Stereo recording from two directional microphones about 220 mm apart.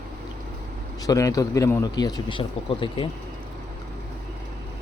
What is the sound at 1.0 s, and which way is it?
A man's voice, 15° left (ahead or behind).